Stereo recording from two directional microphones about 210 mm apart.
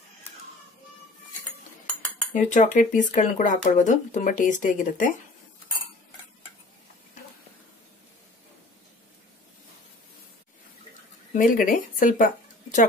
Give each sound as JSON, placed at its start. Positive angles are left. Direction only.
{"t": 2.3, "sound": "speech", "side_deg": 35}
{"t": 11.3, "sound": "speech", "side_deg": 40}